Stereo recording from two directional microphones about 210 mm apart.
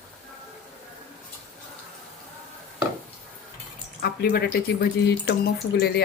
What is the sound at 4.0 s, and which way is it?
Speech, 50° left (ahead or behind).